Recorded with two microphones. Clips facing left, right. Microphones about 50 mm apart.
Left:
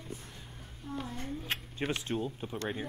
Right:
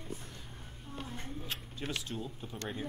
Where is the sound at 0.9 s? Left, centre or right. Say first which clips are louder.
Left 7 dB; left.